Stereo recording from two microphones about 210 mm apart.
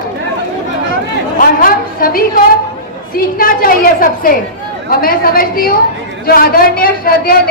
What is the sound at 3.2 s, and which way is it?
A woman's voice, 45° left (ahead or behind).